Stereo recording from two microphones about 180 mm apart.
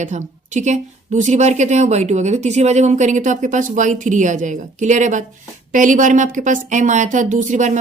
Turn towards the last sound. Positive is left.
turn(degrees=-45)  # may be behind; listen again after turning